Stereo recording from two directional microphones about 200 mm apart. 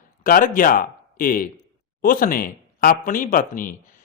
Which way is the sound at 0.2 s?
45° left (ahead or behind).